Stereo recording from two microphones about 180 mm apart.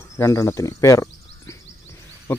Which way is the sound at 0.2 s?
15° left (ahead or behind).